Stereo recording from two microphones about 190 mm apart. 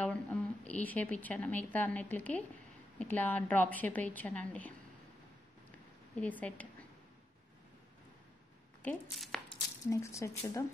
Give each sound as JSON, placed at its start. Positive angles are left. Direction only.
{"t": 0.0, "sound": "a woman's voice", "side_deg": 5}
{"t": 6.1, "sound": "a woman's voice", "side_deg": 10}
{"t": 9.1, "sound": "speech", "side_deg": 0}
{"t": 9.5, "sound": "speech", "side_deg": 15}